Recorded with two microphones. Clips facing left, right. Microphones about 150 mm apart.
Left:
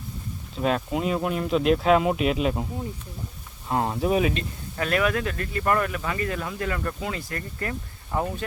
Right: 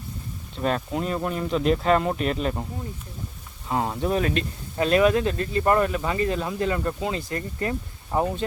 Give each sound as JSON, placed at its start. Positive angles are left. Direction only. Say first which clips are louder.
{"t": 0.5, "sound": "speech", "louder": "left 1 dB", "side_deg": 0}
{"t": 3.7, "sound": "speech", "louder": "left 1 dB", "side_deg": 0}
{"t": 4.8, "sound": "speech", "louder": "right 5 dB", "side_deg": -25}